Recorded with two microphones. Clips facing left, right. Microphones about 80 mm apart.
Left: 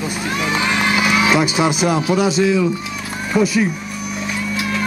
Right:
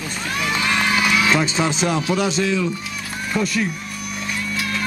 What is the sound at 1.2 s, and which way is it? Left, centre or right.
A man's voice, centre.